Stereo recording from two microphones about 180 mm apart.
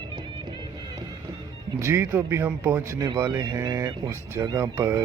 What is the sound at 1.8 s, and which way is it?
Speech, 15° right (ahead or behind).